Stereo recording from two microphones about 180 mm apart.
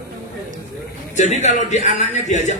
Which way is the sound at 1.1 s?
40° left (ahead or behind).